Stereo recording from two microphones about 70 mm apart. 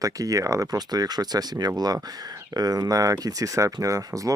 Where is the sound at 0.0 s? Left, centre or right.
Right.